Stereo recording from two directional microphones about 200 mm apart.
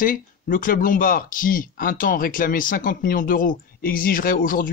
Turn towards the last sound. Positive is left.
turn(degrees=45)  # may be behind; listen again after turning